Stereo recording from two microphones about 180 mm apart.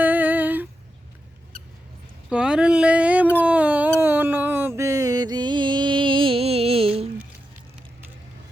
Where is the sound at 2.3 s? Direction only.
5° right (ahead or behind).